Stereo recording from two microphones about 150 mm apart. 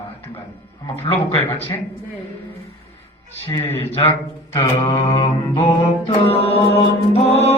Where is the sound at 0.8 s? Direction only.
15° left (ahead or behind).